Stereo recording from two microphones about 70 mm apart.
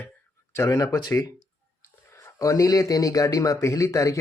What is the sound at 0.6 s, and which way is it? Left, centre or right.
Speech, left.